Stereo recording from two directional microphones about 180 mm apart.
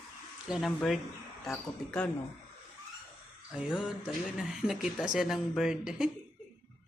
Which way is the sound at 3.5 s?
5° right (ahead or behind).